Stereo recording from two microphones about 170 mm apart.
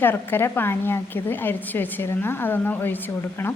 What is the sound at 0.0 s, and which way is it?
A woman's voice, 10° left (ahead or behind).